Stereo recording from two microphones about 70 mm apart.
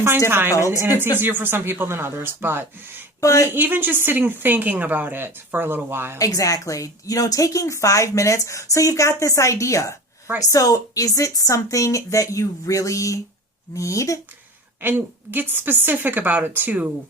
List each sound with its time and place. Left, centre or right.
0.3 s speech: right
0.6 s speech: right
0.9 s speech: right
3.2 s speech: left
3.5 s a woman's voice: right
6.1 s a woman's voice: left
14.8 s a woman's voice: right